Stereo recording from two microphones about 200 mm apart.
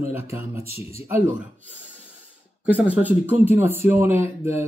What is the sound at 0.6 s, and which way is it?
Speech, 30° left (ahead or behind).